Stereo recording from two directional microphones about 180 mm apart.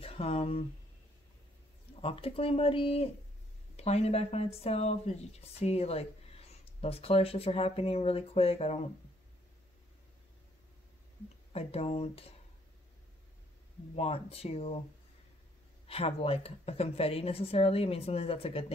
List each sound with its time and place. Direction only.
0.0 s speech: 30° left (ahead or behind)
2.0 s speech: 30° left (ahead or behind)
11.5 s speech: 35° left (ahead or behind)
13.9 s speech: 35° left (ahead or behind)
15.9 s speech: 35° left (ahead or behind)